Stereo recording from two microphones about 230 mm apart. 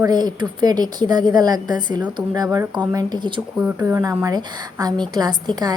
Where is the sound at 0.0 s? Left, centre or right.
Centre.